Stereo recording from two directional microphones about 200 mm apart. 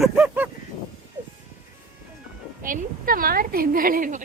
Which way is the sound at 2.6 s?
45° right (ahead or behind).